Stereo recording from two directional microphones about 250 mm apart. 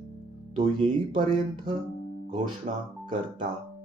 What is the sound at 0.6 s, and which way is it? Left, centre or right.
Speech, right.